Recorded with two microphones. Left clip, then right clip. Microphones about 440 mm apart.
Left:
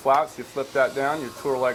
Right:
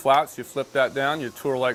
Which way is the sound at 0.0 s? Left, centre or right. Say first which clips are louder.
Right 1 dB; right.